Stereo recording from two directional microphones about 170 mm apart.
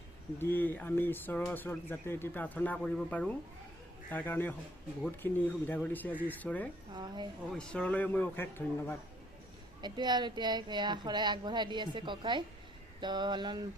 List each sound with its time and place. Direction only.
0.3 s speech: 10° left (ahead or behind)
6.9 s speech: 25° right (ahead or behind)
7.5 s speech: 5° left (ahead or behind)
9.8 s speech: 25° right (ahead or behind)